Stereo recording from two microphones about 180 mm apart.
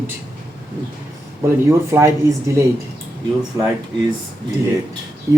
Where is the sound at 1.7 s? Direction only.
15° right (ahead or behind).